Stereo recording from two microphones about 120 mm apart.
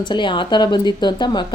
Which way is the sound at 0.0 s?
40° left (ahead or behind).